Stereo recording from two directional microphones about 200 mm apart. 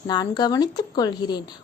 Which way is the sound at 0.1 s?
20° left (ahead or behind).